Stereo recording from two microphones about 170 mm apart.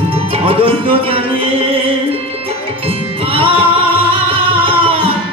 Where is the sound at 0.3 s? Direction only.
30° right (ahead or behind).